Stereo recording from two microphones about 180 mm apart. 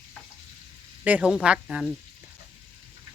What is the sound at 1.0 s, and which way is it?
Speech, 5° right (ahead or behind).